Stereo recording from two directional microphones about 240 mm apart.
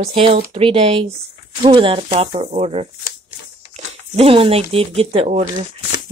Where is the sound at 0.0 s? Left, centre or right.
Right.